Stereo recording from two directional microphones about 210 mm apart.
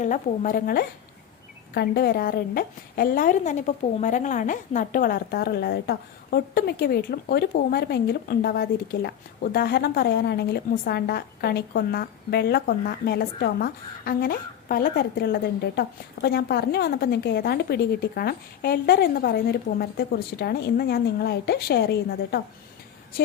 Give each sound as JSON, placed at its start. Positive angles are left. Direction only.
{"t": 0.0, "sound": "a woman's voice", "side_deg": 40}